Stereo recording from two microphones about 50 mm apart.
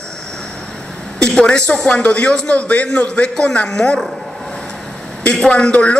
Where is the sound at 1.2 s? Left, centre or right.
Centre.